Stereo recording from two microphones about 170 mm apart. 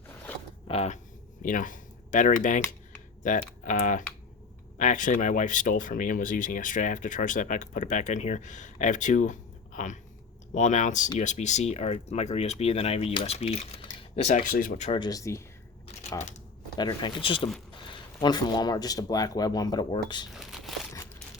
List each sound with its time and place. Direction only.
0.7 s speech: 40° left (ahead or behind)
1.4 s speech: 50° left (ahead or behind)
14.9 s speech: 25° left (ahead or behind)
16.7 s speech: 25° left (ahead or behind)
20.3 s crumpling: centre (ahead or behind)